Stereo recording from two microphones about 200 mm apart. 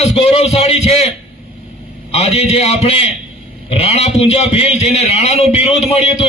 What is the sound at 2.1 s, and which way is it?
A man's voice, 30° left (ahead or behind).